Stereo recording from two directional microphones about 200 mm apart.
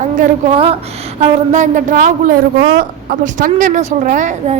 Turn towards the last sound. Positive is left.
turn(degrees=-40)  # may be behind; listen again after turning